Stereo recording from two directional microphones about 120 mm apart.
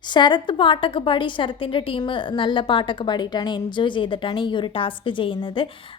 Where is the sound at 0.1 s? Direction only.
40° left (ahead or behind).